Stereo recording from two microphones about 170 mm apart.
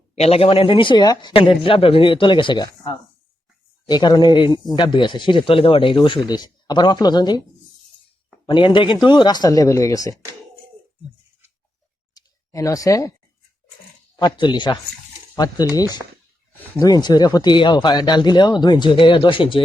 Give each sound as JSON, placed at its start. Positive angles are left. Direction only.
{"t": 0.2, "sound": "speech", "side_deg": 35}
{"t": 8.4, "sound": "speech", "side_deg": 30}
{"t": 12.1, "sound": "clicking", "side_deg": 20}
{"t": 14.2, "sound": "speech", "side_deg": 25}